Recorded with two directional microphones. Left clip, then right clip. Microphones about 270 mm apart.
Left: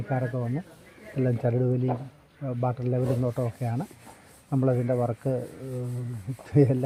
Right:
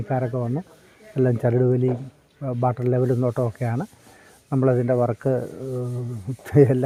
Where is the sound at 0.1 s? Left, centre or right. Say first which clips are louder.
Right 5 dB; right.